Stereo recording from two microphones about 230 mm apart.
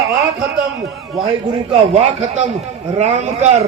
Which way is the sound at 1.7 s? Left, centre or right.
Right.